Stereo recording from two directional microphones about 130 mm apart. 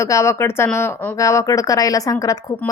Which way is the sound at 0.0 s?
20° left (ahead or behind).